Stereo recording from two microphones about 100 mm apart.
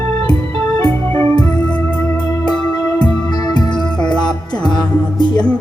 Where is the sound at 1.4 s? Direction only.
10° left (ahead or behind).